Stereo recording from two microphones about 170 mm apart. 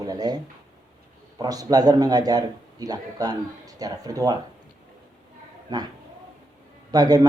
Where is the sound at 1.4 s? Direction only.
20° right (ahead or behind).